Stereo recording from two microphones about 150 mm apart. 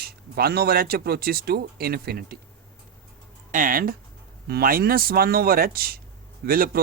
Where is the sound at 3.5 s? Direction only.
65° right (ahead or behind).